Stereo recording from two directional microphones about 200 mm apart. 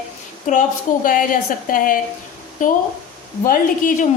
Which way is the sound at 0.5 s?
40° left (ahead or behind).